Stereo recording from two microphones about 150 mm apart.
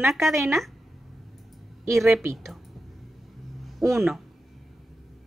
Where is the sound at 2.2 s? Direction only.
20° right (ahead or behind).